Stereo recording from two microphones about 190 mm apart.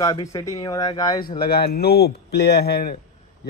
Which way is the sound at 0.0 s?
15° left (ahead or behind).